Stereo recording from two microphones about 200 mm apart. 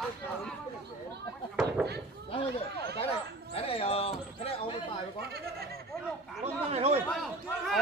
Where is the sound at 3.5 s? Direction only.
30° left (ahead or behind).